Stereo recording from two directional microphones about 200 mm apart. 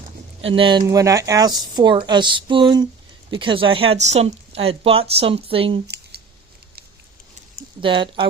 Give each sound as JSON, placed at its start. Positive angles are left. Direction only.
{"t": 0.5, "sound": "speech", "side_deg": -25}
{"t": 7.8, "sound": "speech", "side_deg": -25}